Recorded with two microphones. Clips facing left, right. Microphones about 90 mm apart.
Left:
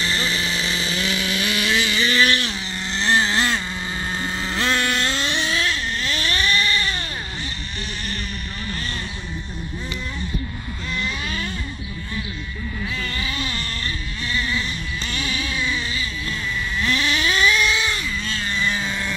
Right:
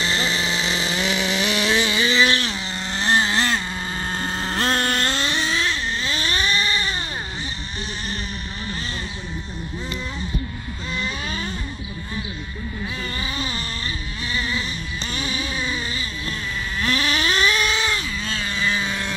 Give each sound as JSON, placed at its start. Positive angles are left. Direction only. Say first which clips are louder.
{"t": 0.0, "sound": "vehicle", "louder": "right 1 dB", "side_deg": -25}
{"t": 0.8, "sound": "chainsaw", "louder": "right 2 dB", "side_deg": -20}
{"t": 2.9, "sound": "vehicle", "louder": "even", "side_deg": -35}
{"t": 11.0, "sound": "vehicle", "louder": "left 1 dB", "side_deg": -30}
{"t": 12.9, "sound": "a sound", "louder": "left 1 dB", "side_deg": -30}
{"t": 16.8, "sound": "cat", "louder": "even", "side_deg": -45}